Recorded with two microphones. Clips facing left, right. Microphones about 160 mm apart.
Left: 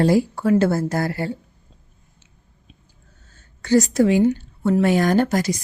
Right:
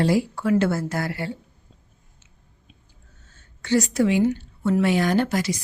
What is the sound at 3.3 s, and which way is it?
A woman's voice, 40° left (ahead or behind).